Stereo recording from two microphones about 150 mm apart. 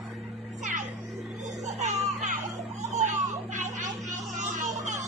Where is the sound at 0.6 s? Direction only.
55° right (ahead or behind).